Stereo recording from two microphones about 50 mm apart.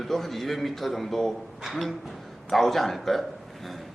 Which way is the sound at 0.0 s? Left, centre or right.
Centre.